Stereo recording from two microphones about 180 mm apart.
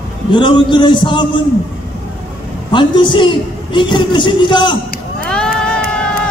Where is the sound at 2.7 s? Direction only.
25° left (ahead or behind).